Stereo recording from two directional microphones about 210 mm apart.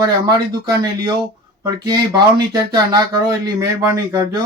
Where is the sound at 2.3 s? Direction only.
20° right (ahead or behind).